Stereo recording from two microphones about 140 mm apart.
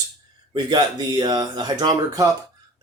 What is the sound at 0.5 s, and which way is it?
Speech, 30° right (ahead or behind).